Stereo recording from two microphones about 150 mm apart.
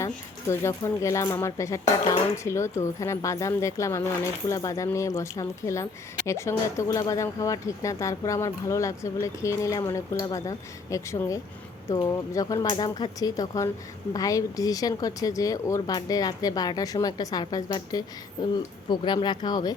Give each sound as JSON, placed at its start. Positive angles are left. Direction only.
{"t": 0.0, "sound": "speech", "side_deg": 20}